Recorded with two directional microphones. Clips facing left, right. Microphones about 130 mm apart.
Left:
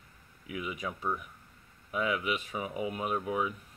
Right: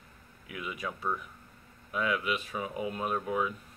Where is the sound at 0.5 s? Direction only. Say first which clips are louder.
Left 1 dB; 20° left (ahead or behind).